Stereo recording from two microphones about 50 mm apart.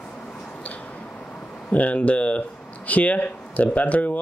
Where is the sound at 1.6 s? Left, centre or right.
Left.